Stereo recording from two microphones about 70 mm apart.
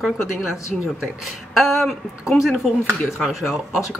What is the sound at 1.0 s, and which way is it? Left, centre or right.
Speech, centre.